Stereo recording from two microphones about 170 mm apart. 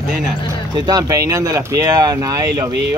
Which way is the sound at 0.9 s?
20° right (ahead or behind).